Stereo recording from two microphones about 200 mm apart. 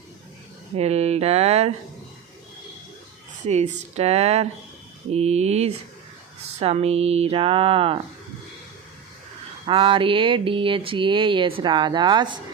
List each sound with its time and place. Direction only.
0.8 s speech: 30° right (ahead or behind)
3.4 s speech: 35° right (ahead or behind)
9.6 s speech: 25° right (ahead or behind)